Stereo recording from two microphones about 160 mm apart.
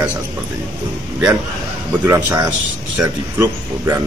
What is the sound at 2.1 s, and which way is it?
Speech, 10° right (ahead or behind).